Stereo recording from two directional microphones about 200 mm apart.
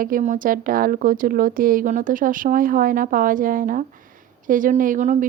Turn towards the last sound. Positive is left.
turn(degrees=-40)  # may be behind; listen again after turning